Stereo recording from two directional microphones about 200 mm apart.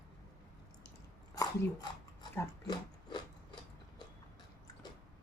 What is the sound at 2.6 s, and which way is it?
Biting, 20° left (ahead or behind).